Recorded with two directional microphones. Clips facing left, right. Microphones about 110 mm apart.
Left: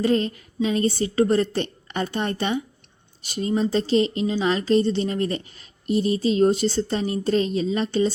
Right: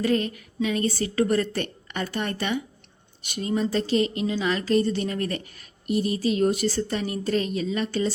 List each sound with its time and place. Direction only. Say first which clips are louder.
0.0 s a woman's voice: left 3 dB; 30° left (ahead or behind)